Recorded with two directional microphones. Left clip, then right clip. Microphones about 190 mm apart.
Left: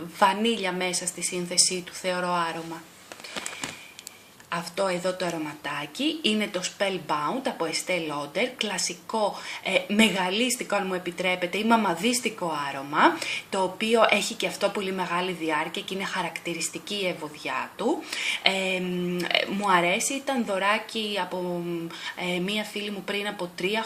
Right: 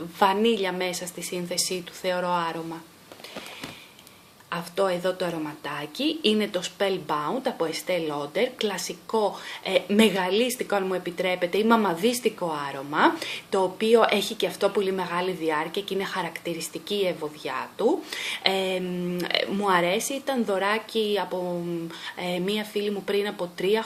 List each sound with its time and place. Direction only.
0.2 s speech: 40° right (ahead or behind)
4.5 s speech: 40° right (ahead or behind)